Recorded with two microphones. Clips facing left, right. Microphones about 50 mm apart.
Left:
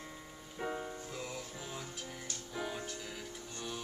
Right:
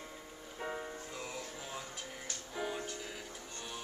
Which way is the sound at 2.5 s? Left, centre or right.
Centre.